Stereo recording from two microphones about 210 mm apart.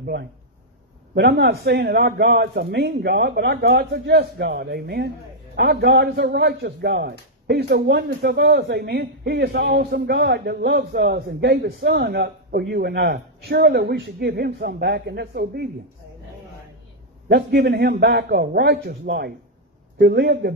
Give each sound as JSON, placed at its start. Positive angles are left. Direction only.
{"t": 0.0, "sound": "a man's voice", "side_deg": -50}
{"t": 17.3, "sound": "a man's voice", "side_deg": -50}